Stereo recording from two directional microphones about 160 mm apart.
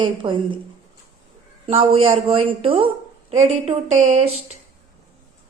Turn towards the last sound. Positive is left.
turn(degrees=-40)  # may be behind; listen again after turning